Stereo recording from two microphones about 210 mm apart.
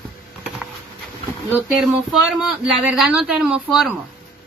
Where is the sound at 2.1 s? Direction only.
Centre (ahead or behind).